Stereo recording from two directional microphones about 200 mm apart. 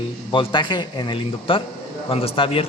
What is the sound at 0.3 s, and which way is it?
Speech, 25° left (ahead or behind).